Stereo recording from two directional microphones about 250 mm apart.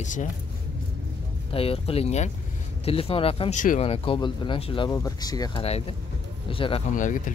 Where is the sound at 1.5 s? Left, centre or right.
Left.